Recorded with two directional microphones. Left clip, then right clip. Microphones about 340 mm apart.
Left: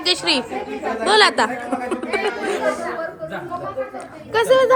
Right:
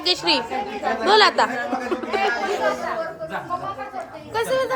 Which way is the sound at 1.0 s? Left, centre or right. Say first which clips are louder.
Left 1 dB; left.